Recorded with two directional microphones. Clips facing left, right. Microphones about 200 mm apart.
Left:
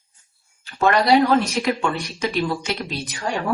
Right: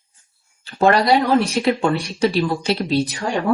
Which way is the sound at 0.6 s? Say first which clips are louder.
Right 3 dB; 30° right (ahead or behind).